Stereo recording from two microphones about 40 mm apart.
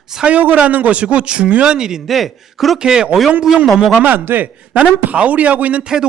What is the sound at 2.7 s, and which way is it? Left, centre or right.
Speech, centre.